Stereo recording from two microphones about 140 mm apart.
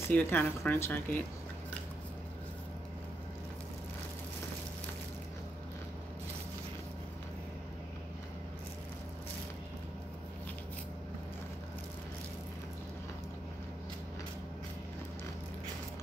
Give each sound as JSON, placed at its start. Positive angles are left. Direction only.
{"t": 0.1, "sound": "speech", "side_deg": 15}